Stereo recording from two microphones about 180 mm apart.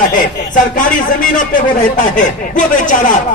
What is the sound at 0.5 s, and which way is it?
Speech, 45° left (ahead or behind).